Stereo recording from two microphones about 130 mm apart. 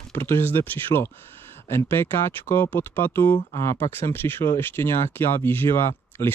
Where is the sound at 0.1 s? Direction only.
20° left (ahead or behind).